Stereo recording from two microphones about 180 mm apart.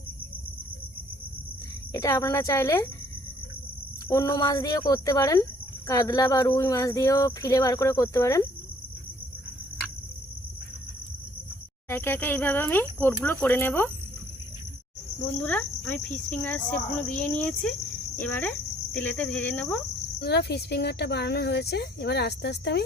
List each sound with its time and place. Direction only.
1.9 s speech: 20° left (ahead or behind)
4.1 s speech: 20° left (ahead or behind)
11.9 s speech: 10° left (ahead or behind)
15.4 s speech: 5° left (ahead or behind)
18.2 s cricket: 10° left (ahead or behind)
20.1 s speech: 65° left (ahead or behind)